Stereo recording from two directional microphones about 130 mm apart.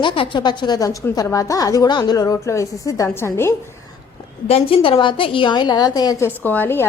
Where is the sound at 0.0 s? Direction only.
40° left (ahead or behind); by 3.5 s 20° left (ahead or behind).